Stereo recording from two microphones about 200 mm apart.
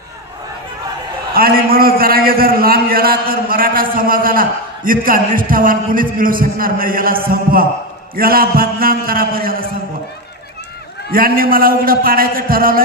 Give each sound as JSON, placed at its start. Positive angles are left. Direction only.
{"t": 1.3, "sound": "a man's voice", "side_deg": -50}
{"t": 8.2, "sound": "a sound", "side_deg": -45}
{"t": 11.1, "sound": "a man's voice", "side_deg": -45}